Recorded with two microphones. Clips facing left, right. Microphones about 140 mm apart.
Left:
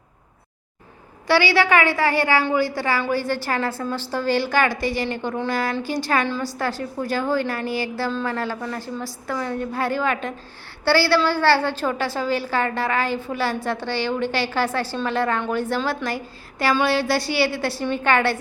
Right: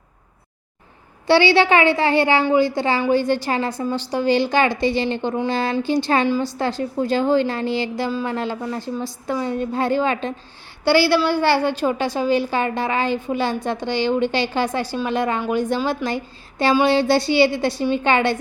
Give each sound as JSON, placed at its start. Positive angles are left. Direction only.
{"t": 1.3, "sound": "a woman's voice", "side_deg": -25}